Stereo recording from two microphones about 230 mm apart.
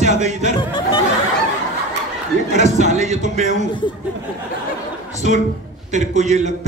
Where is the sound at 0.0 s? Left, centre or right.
Right.